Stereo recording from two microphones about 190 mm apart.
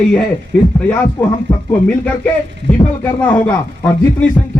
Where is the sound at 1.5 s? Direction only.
20° left (ahead or behind).